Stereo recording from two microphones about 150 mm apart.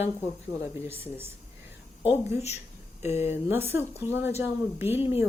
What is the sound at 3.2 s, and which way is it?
Speech, 15° right (ahead or behind).